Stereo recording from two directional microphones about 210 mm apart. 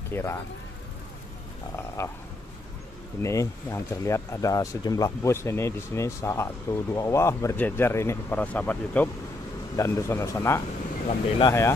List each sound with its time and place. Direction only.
0.1 s speech: 10° left (ahead or behind)
3.2 s speech: 15° left (ahead or behind)
11.1 s speech: 25° left (ahead or behind)